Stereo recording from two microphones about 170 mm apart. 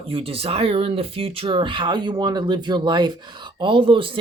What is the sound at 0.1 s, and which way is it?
Speech, 35° right (ahead or behind).